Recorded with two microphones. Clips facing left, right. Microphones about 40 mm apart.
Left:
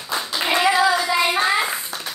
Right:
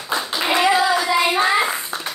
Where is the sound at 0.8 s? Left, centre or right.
Centre.